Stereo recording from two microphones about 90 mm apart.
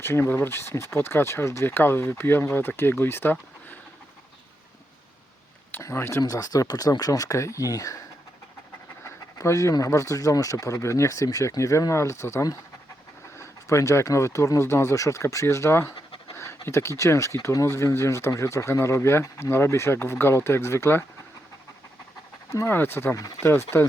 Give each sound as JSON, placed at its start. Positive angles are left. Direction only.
{"t": 0.0, "sound": "speech", "side_deg": 25}
{"t": 5.8, "sound": "speech", "side_deg": 30}
{"t": 6.2, "sound": "speech", "side_deg": 45}
{"t": 9.0, "sound": "pant", "side_deg": 35}
{"t": 9.7, "sound": "speech", "side_deg": 35}
{"t": 22.5, "sound": "speech", "side_deg": 25}